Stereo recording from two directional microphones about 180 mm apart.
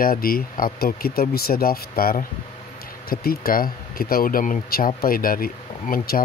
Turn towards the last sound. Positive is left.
turn(degrees=55)  # may be behind; listen again after turning